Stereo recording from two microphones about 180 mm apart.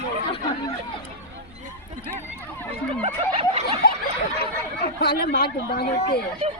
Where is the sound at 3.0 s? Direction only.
35° right (ahead or behind).